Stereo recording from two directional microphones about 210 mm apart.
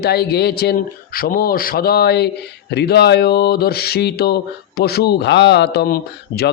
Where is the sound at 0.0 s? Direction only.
50° left (ahead or behind).